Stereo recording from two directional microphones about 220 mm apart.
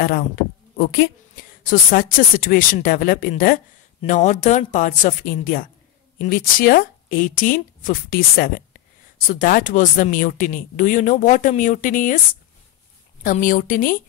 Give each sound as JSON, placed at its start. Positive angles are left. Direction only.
{"t": 1.7, "sound": "speech", "side_deg": 40}
{"t": 13.2, "sound": "speech", "side_deg": 35}